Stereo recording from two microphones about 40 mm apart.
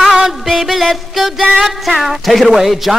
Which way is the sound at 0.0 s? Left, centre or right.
Centre.